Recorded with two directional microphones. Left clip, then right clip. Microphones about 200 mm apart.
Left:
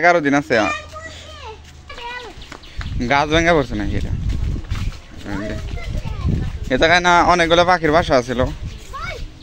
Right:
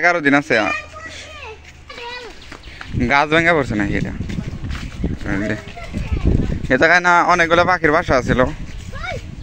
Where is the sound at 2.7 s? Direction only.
15° right (ahead or behind).